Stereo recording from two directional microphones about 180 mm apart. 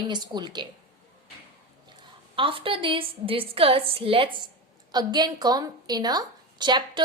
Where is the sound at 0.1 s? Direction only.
25° right (ahead or behind).